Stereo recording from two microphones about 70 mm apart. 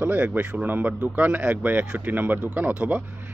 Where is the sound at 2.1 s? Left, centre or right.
Right.